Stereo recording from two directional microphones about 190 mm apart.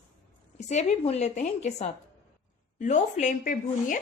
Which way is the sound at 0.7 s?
35° left (ahead or behind).